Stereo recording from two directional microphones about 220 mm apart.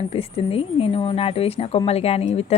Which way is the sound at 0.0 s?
25° left (ahead or behind).